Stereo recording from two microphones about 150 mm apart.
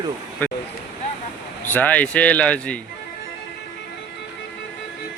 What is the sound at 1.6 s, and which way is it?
Speech, 10° left (ahead or behind).